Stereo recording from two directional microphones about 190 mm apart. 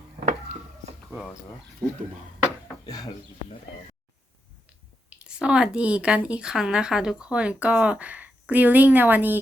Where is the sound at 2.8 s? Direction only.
20° left (ahead or behind).